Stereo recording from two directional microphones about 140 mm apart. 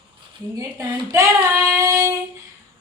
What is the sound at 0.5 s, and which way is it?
Speech, 25° right (ahead or behind).